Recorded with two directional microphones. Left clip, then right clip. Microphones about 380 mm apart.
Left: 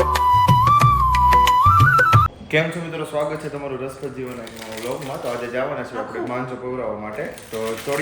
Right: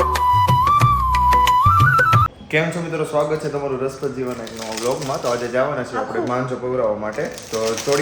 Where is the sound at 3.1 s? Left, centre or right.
Centre.